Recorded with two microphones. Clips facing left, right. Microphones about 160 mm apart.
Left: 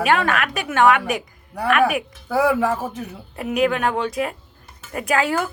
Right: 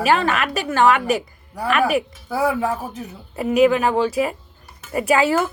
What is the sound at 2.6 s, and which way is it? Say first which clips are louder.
Speech: left 2 dB; 90° left.